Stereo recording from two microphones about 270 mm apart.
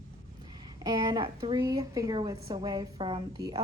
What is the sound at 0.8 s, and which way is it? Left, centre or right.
A woman's voice, centre.